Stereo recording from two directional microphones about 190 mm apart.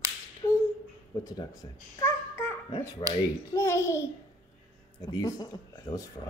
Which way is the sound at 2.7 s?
25° left (ahead or behind).